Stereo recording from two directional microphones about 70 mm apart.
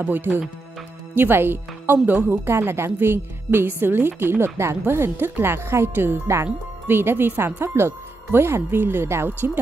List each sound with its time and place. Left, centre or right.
0.0 s speech: right